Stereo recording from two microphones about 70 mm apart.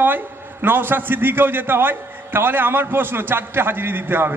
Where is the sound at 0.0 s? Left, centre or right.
Right.